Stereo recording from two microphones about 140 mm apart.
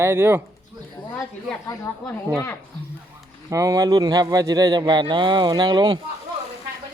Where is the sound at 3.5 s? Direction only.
25° right (ahead or behind).